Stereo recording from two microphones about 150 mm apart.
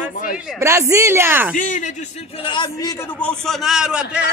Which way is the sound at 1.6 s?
55° left (ahead or behind).